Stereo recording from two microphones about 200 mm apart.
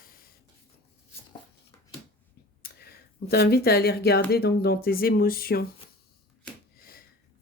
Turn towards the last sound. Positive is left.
turn(degrees=50)  # may be behind; listen again after turning